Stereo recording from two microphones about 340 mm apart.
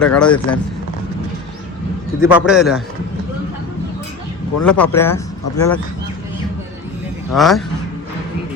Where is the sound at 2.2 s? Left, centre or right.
Centre.